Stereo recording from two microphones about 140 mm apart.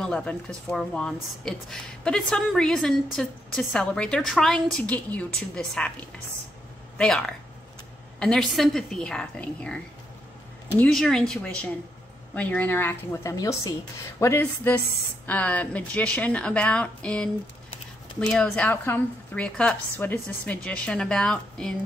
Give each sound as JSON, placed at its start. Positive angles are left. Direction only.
{"t": 0.0, "sound": "a woman's voice", "side_deg": 5}
{"t": 7.0, "sound": "a woman's voice", "side_deg": 5}
{"t": 10.8, "sound": "a woman's voice", "side_deg": 5}
{"t": 18.3, "sound": "a woman's voice", "side_deg": 10}